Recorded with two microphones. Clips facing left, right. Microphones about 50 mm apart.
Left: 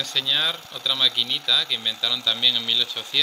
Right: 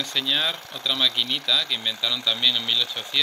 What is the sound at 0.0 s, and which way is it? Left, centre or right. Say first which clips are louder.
Speech: even; centre.